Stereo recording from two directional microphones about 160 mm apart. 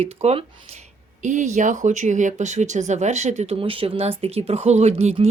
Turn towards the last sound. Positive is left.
turn(degrees=-40)  # may be behind; listen again after turning